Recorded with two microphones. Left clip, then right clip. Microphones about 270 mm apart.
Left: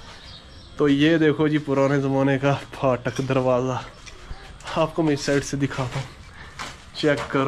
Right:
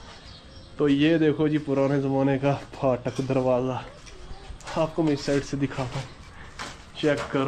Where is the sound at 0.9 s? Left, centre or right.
Centre.